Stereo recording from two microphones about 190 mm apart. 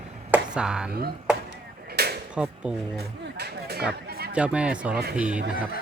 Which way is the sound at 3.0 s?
60° right (ahead or behind).